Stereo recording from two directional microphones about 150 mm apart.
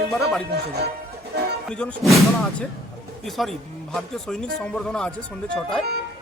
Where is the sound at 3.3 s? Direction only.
Centre (ahead or behind).